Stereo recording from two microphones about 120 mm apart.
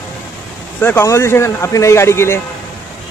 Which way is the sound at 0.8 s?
20° left (ahead or behind).